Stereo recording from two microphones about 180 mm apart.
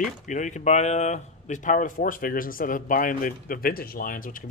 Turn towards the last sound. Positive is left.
turn(degrees=50)  # may be behind; listen again after turning